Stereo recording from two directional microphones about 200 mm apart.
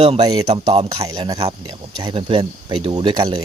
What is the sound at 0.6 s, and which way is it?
Speech, 30° right (ahead or behind).